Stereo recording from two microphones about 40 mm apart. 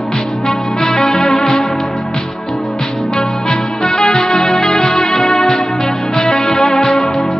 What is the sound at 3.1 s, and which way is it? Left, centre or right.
Music, centre.